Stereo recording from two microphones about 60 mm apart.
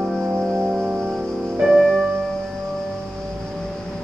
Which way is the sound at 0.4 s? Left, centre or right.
Centre.